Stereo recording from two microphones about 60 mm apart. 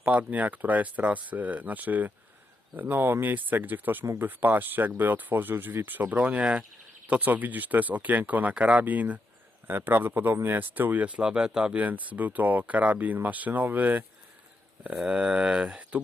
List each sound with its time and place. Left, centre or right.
0.0 s speech: right
14.9 s speech: centre